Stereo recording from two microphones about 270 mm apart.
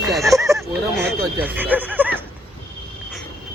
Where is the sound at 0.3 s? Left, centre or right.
Centre.